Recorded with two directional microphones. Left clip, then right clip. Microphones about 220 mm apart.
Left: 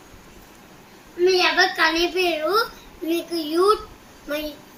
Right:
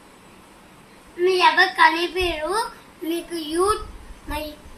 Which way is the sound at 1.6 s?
10° right (ahead or behind).